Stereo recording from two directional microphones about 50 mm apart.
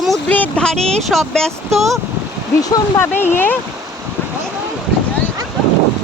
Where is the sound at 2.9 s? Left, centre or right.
Left.